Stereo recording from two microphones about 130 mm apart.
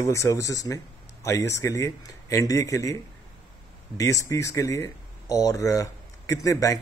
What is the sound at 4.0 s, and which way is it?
Speech, 25° left (ahead or behind).